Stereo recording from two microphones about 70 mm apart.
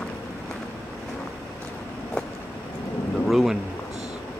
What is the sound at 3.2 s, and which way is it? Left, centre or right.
Speech, centre.